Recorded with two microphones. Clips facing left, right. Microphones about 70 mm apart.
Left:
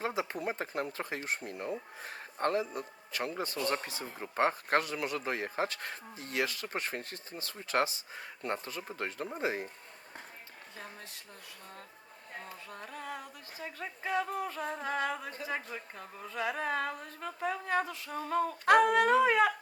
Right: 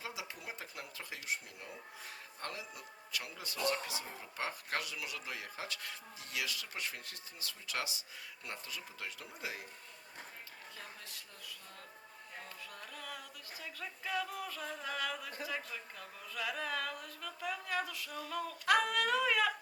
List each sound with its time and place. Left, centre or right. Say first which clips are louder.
0.0 s speech: left 11 dB; left
12.7 s speech: left 7 dB; left